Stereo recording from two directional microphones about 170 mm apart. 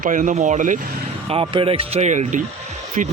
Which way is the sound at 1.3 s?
30° right (ahead or behind).